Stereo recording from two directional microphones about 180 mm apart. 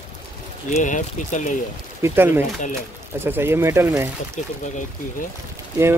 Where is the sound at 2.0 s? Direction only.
15° right (ahead or behind).